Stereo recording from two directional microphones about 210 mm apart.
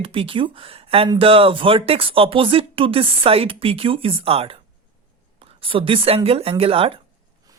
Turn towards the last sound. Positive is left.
turn(degrees=-25)  # may be behind; listen again after turning